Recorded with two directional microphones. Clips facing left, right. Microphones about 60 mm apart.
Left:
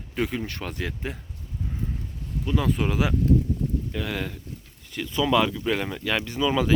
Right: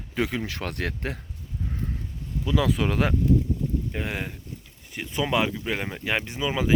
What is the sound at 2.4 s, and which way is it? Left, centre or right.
Speech, right.